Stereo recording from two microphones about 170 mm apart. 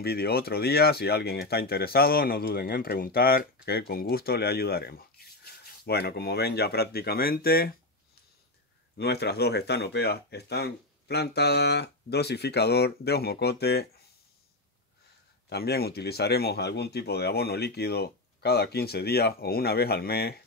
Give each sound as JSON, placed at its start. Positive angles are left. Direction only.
{"t": 0.0, "sound": "speech", "side_deg": 65}
{"t": 8.9, "sound": "speech", "side_deg": 75}
{"t": 15.5, "sound": "speech", "side_deg": 70}